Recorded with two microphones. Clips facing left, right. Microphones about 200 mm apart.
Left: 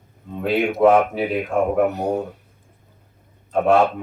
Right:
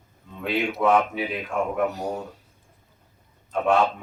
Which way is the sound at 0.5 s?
50° left (ahead or behind).